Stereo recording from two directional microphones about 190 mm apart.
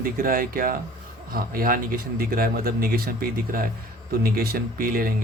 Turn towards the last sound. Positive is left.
turn(degrees=-50)  # may be behind; listen again after turning